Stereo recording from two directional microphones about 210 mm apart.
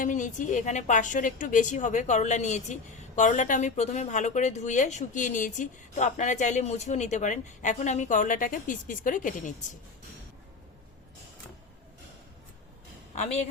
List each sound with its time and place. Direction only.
0.0 s speech: 35° left (ahead or behind)
13.1 s speech: 30° left (ahead or behind)